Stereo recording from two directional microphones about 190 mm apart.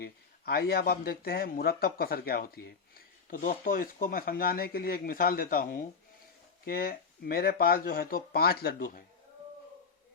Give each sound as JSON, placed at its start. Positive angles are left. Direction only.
{"t": 0.0, "sound": "speech", "side_deg": 55}